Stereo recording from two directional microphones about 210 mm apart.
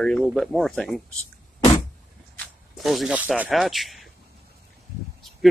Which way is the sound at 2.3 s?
5° left (ahead or behind).